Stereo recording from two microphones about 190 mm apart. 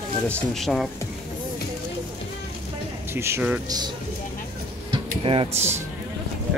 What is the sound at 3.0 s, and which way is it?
Speech, 15° right (ahead or behind).